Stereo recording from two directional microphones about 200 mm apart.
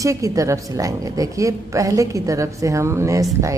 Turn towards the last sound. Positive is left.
turn(degrees=-15)  # may be behind; listen again after turning